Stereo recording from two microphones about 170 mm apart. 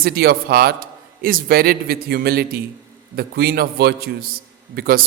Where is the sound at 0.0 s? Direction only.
65° right (ahead or behind).